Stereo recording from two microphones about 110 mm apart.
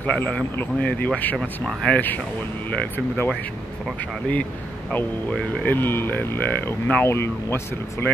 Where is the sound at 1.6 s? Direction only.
Centre (ahead or behind).